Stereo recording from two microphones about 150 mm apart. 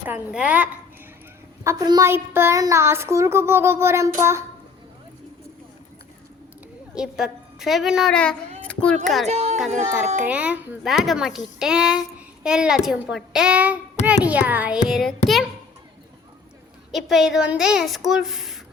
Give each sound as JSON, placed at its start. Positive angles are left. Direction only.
{"t": 0.1, "sound": "a woman's voice", "side_deg": -10}
{"t": 1.6, "sound": "a woman's voice", "side_deg": -25}
{"t": 6.9, "sound": "a child's voice", "side_deg": -5}
{"t": 8.6, "sound": "a sound", "side_deg": 10}
{"t": 9.2, "sound": "speech", "side_deg": -45}
{"t": 10.2, "sound": "a woman's voice", "side_deg": -10}
{"t": 10.9, "sound": "a child's voice", "side_deg": 0}
{"t": 16.9, "sound": "a child's voice", "side_deg": 0}